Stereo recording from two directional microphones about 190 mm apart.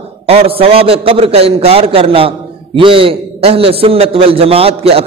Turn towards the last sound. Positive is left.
turn(degrees=-30)  # may be behind; listen again after turning